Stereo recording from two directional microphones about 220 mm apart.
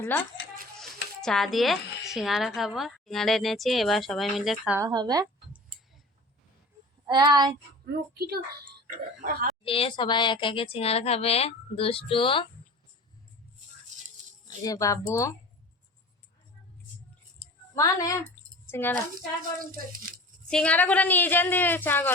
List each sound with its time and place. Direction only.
0.0 s a woman's voice: 10° left (ahead or behind)
4.8 s speech: 20° right (ahead or behind)
7.1 s speech: 20° right (ahead or behind)
8.1 s a woman's voice: 45° right (ahead or behind)
9.6 s speech: 25° left (ahead or behind)
14.4 s speech: 15° left (ahead or behind)
17.7 s speech: 15° left (ahead or behind)
20.5 s speech: 5° left (ahead or behind)